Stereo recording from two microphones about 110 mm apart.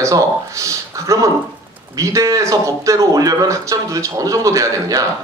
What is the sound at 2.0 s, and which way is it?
Speech, 30° right (ahead or behind).